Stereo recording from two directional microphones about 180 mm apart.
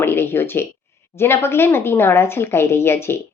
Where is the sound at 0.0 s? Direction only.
15° left (ahead or behind).